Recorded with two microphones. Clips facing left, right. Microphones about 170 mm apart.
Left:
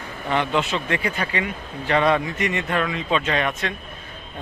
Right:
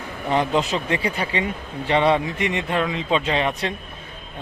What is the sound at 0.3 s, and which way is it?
A man's voice, 35° right (ahead or behind).